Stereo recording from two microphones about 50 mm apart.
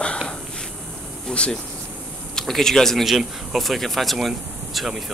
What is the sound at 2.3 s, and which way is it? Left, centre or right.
Speech, centre.